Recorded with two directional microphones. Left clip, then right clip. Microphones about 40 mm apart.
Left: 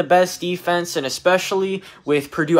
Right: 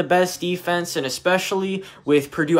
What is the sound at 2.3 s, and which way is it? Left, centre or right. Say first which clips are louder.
Speech: left 1 dB; right.